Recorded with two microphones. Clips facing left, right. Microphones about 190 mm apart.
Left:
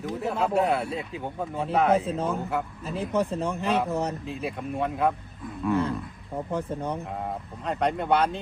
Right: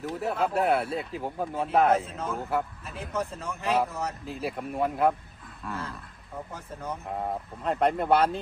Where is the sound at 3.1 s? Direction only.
35° left (ahead or behind).